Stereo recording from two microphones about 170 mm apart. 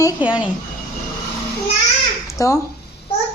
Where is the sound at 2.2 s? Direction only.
20° left (ahead or behind).